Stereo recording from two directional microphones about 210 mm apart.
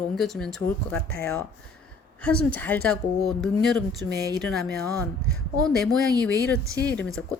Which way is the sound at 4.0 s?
5° left (ahead or behind).